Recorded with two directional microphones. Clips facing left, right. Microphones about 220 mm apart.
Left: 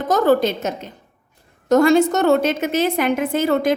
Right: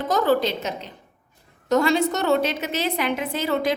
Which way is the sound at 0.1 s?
45° left (ahead or behind).